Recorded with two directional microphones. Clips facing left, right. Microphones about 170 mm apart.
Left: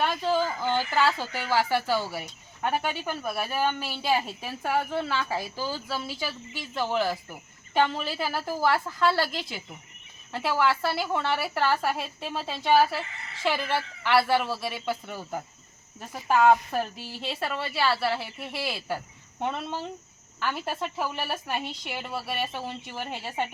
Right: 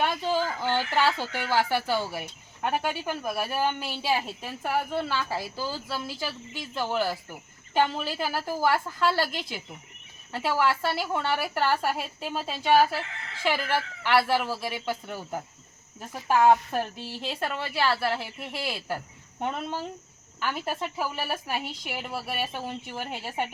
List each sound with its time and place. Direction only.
0.3 s a woman's voice: centre (ahead or behind)
4.1 s a woman's voice: centre (ahead or behind)
16.5 s a woman's voice: centre (ahead or behind)